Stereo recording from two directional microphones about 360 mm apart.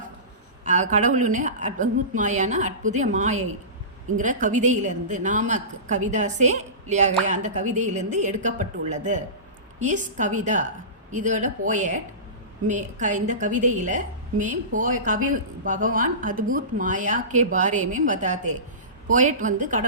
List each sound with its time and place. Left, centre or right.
0.6 s a woman's voice: centre